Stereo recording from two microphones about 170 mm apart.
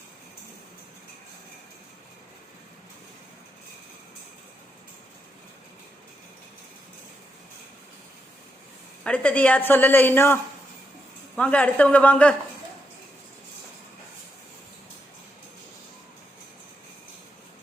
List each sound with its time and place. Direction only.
9.0 s a woman's voice: 10° left (ahead or behind)